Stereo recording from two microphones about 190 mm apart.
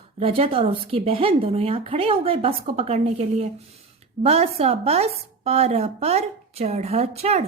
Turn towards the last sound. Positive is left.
turn(degrees=-35)  # may be behind; listen again after turning